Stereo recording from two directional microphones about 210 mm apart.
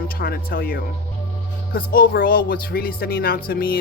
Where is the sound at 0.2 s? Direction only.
45° left (ahead or behind).